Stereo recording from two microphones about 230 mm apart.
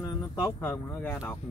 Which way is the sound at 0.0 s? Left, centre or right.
Centre.